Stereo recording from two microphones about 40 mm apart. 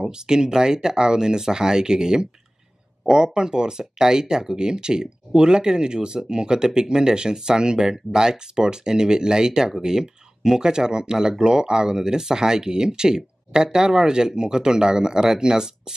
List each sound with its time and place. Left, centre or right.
0.0 s speech: centre